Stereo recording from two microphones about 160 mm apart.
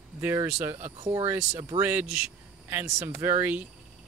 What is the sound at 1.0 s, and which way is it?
Speech, 40° right (ahead or behind).